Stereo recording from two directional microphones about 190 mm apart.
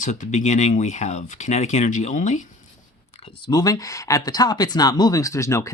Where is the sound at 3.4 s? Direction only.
20° left (ahead or behind).